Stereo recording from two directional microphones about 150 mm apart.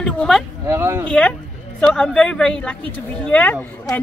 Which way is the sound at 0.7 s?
20° right (ahead or behind).